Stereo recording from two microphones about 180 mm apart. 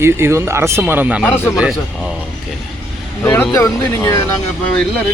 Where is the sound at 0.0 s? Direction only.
15° right (ahead or behind).